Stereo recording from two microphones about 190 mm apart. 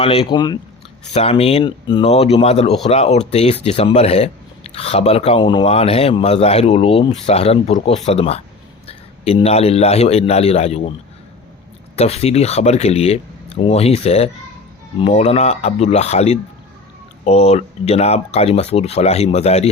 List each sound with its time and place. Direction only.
0.0 s speech: 30° left (ahead or behind)
1.0 s speech: 35° left (ahead or behind)
11.9 s speech: 35° left (ahead or behind)